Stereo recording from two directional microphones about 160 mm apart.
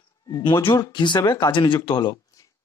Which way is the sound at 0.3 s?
25° left (ahead or behind).